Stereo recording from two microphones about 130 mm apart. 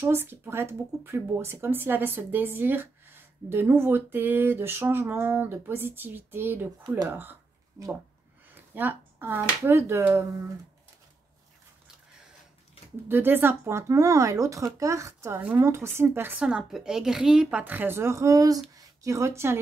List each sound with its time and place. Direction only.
0.0 s speech: 15° right (ahead or behind)
8.7 s speech: 15° right (ahead or behind)
13.1 s speech: 15° right (ahead or behind)
16.3 s a woman's voice: 5° right (ahead or behind)